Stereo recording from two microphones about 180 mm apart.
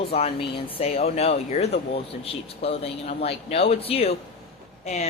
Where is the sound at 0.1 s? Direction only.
35° left (ahead or behind).